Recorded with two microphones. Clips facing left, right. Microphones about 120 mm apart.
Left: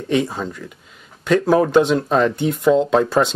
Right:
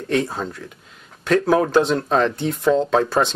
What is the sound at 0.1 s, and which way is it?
Speech, centre (ahead or behind).